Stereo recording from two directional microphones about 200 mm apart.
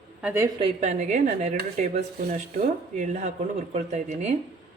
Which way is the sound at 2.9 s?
35° right (ahead or behind).